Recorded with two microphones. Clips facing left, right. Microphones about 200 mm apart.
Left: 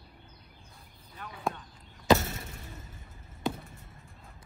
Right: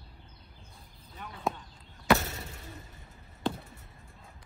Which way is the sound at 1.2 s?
Centre (ahead or behind).